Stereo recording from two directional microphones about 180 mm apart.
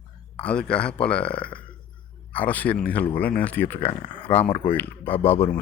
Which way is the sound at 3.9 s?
25° left (ahead or behind).